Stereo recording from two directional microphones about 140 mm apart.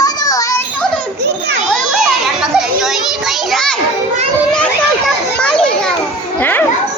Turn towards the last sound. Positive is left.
turn(degrees=15)  # may be behind; listen again after turning